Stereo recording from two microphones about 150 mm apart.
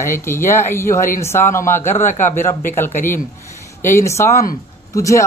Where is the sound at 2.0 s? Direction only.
55° left (ahead or behind).